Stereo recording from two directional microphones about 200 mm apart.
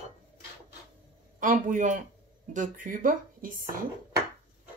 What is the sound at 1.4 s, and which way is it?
Speech, 40° right (ahead or behind).